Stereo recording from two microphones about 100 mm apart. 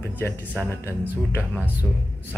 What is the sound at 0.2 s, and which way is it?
Speech, 25° left (ahead or behind).